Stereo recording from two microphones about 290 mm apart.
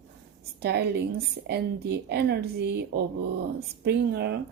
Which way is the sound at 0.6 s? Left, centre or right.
Right.